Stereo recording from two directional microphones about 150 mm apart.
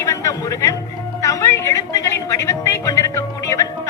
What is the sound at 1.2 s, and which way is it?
Music, 20° left (ahead or behind).